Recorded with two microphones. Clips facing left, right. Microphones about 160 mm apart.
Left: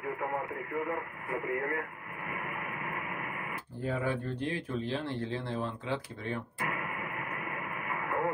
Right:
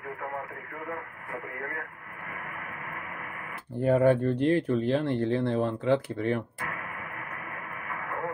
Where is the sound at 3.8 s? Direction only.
55° right (ahead or behind).